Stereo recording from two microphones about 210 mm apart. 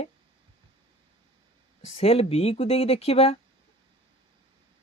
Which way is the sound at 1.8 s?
30° left (ahead or behind).